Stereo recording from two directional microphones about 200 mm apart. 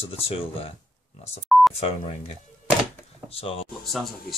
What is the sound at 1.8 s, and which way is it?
Speech, 30° left (ahead or behind).